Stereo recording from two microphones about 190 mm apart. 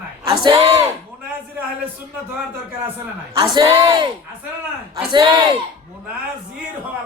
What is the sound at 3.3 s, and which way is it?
Speech, 20° right (ahead or behind).